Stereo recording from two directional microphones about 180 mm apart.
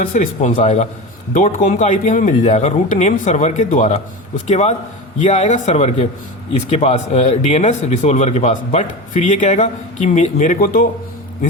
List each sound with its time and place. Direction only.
0.0 s speech: 45° left (ahead or behind)